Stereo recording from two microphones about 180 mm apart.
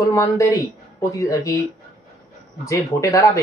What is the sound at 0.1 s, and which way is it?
Speech, 15° left (ahead or behind).